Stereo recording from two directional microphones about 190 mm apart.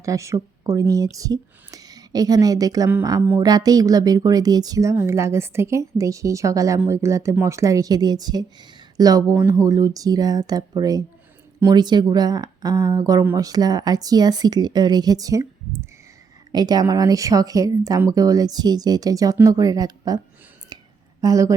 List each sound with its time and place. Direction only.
0.0 s a woman's voice: 15° right (ahead or behind)
20.7 s a sound: 20° right (ahead or behind)
21.2 s a woman's voice: 15° right (ahead or behind)